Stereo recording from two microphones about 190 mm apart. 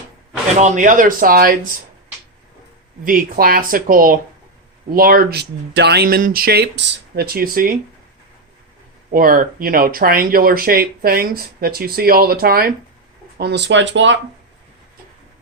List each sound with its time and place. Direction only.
0.6 s speech: 40° right (ahead or behind)
3.0 s speech: 45° right (ahead or behind)
9.1 s speech: 45° right (ahead or behind)
13.4 s speech: 65° right (ahead or behind)